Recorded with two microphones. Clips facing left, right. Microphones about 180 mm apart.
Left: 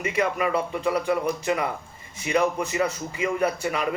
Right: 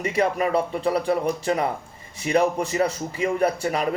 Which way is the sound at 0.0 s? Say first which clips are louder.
Right 2 dB; 35° right (ahead or behind).